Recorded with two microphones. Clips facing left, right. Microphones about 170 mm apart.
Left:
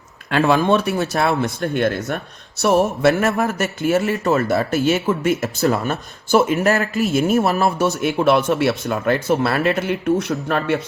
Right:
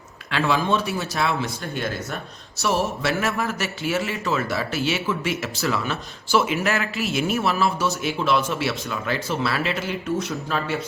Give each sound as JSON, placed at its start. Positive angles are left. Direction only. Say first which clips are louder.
{"t": 0.3, "sound": "a man's voice", "louder": "left 6 dB", "side_deg": 50}